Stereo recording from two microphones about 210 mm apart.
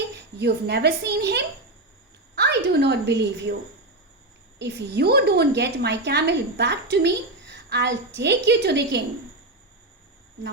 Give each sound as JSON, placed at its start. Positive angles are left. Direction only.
{"t": 0.3, "sound": "a woman's voice", "side_deg": -50}
{"t": 4.6, "sound": "a woman's voice", "side_deg": -50}